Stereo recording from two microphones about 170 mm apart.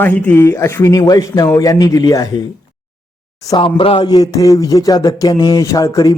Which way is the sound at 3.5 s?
30° left (ahead or behind).